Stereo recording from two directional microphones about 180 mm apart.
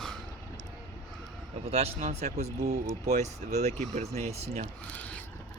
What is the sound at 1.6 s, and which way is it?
Speech, 35° right (ahead or behind).